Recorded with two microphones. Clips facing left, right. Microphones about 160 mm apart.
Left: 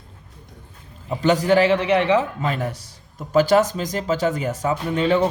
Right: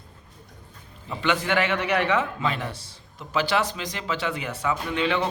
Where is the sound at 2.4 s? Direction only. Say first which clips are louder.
Left 3 dB; 45° left (ahead or behind).